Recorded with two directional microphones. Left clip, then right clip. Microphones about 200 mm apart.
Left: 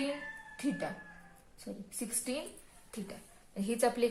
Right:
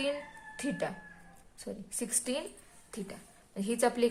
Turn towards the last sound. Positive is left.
turn(degrees=-35)  # may be behind; listen again after turning